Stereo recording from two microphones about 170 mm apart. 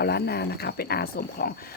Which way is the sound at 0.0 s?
70° left (ahead or behind).